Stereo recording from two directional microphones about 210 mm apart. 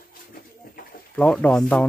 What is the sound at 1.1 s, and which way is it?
Speech, 5° left (ahead or behind).